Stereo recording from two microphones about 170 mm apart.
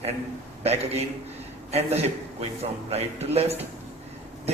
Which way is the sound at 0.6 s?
40° right (ahead or behind).